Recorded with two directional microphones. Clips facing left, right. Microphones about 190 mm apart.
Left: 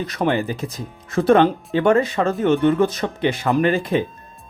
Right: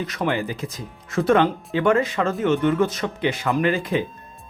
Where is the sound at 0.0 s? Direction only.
35° left (ahead or behind).